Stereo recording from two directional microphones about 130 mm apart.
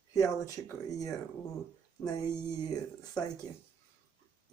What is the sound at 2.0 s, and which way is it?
Speech, 10° left (ahead or behind).